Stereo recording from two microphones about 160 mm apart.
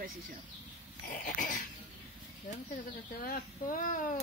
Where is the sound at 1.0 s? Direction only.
55° left (ahead or behind).